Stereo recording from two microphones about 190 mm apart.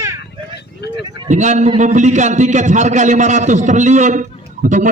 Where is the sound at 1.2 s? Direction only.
40° right (ahead or behind).